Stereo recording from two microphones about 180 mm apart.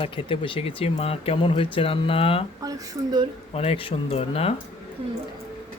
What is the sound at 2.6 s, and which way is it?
Speech, 20° right (ahead or behind).